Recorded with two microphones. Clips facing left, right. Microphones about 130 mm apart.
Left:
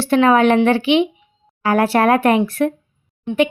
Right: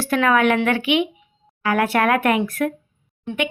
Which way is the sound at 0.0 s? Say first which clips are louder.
Left 5 dB; 25° left (ahead or behind).